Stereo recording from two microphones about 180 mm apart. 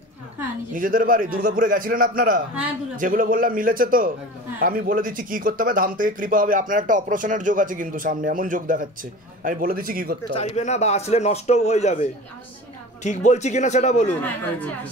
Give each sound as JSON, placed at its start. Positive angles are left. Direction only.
{"t": 0.7, "sound": "speech", "side_deg": -50}
{"t": 10.3, "sound": "a man's voice", "side_deg": 35}